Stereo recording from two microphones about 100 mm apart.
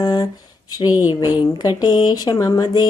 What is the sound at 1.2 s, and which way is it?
Speech, 45° left (ahead or behind).